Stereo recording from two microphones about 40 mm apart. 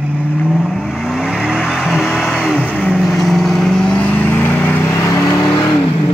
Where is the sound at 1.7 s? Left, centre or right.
Centre.